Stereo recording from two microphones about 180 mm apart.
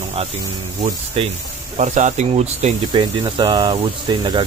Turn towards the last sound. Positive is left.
turn(degrees=-25)  # may be behind; listen again after turning